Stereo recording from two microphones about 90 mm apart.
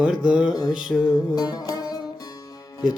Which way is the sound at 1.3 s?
45° left (ahead or behind).